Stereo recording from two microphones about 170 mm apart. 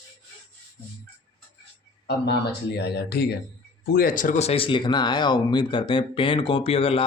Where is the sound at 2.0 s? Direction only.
75° left (ahead or behind).